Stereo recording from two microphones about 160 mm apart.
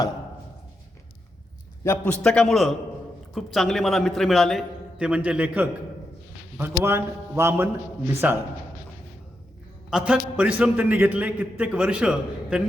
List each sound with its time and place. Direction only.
1.8 s a man's voice: 15° left (ahead or behind)
2.2 s a man's voice: 5° left (ahead or behind); by 8.4 s 15° right (ahead or behind)
9.9 s a man's voice: 5° right (ahead or behind)